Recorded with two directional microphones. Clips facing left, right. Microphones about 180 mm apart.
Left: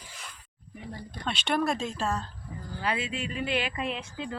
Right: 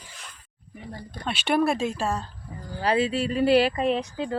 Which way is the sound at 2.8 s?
35° right (ahead or behind).